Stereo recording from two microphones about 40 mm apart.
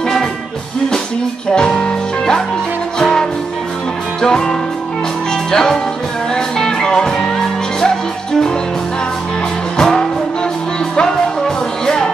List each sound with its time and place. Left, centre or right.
1.5 s music: centre
9.8 s music: centre